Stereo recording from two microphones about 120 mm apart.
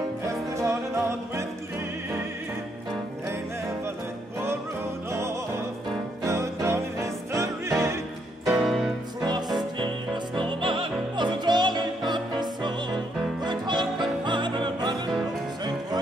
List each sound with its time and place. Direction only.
0.3 s music: 25° right (ahead or behind)
5.1 s music: 25° right (ahead or behind)
8.5 s music: centre (ahead or behind)
9.8 s music: 45° right (ahead or behind)